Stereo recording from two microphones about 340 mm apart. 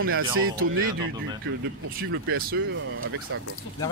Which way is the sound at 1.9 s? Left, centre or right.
Right.